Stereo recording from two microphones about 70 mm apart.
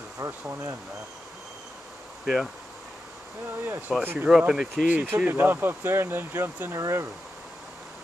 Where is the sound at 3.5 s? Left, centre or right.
Right.